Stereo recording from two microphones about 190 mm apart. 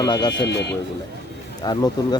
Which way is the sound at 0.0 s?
20° left (ahead or behind).